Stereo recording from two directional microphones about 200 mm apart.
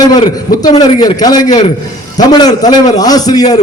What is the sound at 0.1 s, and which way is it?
A man's voice, 20° left (ahead or behind).